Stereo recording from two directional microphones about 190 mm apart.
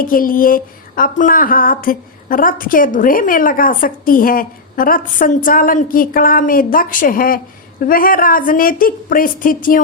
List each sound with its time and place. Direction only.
0.0 s speech: 45° left (ahead or behind)